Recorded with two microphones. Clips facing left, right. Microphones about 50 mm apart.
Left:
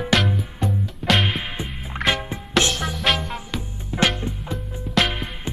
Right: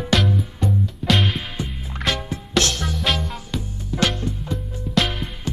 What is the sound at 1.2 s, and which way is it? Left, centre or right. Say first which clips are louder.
Music: even; left.